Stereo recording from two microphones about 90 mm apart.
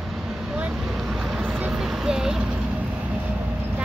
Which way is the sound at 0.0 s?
5° right (ahead or behind).